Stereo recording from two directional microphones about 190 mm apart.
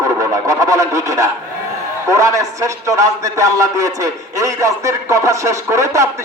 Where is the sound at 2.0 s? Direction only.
15° right (ahead or behind).